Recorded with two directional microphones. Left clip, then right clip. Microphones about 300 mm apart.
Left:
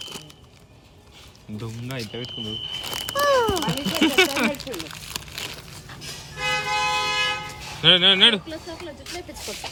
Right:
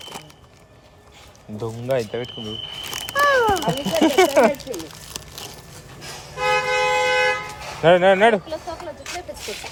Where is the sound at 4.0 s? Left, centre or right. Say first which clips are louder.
Right 2 dB; centre.